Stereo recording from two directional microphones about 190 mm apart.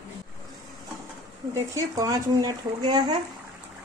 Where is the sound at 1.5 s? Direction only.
20° right (ahead or behind).